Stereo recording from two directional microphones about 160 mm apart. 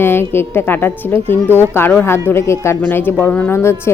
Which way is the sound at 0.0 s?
15° left (ahead or behind).